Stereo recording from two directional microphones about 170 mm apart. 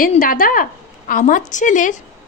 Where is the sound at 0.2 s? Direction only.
55° left (ahead or behind).